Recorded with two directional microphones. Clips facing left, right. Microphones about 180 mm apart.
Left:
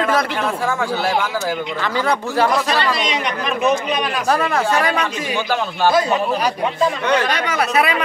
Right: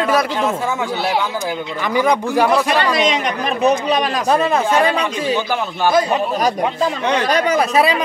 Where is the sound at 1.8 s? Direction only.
15° right (ahead or behind).